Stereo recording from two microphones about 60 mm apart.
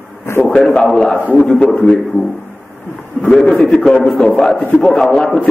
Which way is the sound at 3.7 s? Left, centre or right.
Centre.